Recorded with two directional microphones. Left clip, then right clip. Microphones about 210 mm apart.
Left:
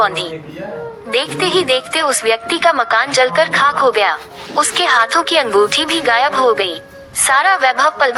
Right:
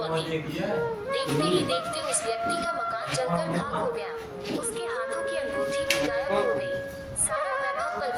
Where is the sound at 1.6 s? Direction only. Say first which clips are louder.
Left 13 dB; 90° left.